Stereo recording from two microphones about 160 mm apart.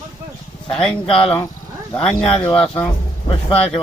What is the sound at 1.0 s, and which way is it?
Speech, 35° left (ahead or behind).